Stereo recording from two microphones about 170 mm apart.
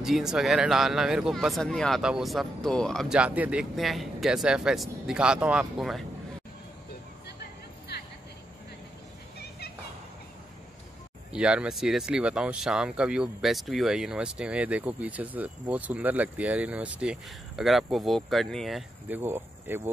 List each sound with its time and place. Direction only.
0.0 s speech: centre (ahead or behind)
7.9 s vehicle: 80° left
11.3 s speech: 5° right (ahead or behind)